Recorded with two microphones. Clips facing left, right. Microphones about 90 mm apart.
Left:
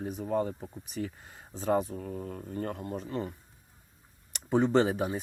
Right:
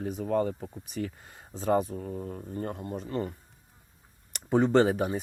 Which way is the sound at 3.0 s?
50° right (ahead or behind).